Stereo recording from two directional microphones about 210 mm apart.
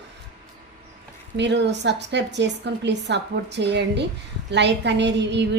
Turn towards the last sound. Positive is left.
turn(degrees=-55)  # may be behind; listen again after turning